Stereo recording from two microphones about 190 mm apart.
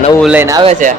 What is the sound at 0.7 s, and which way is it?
Speech, 40° right (ahead or behind).